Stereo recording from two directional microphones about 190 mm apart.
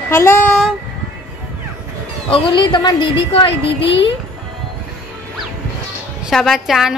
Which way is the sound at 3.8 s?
70° left (ahead or behind).